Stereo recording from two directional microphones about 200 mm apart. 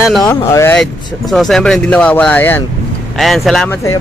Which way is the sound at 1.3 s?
Centre (ahead or behind).